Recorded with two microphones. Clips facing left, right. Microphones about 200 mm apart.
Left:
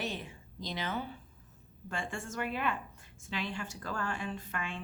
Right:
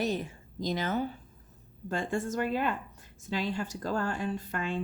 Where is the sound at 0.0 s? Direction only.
40° right (ahead or behind).